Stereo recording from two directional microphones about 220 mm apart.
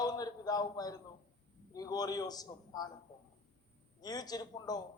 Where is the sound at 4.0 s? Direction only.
15° left (ahead or behind).